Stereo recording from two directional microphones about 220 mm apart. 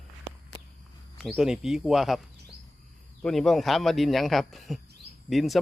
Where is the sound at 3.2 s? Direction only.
Centre (ahead or behind).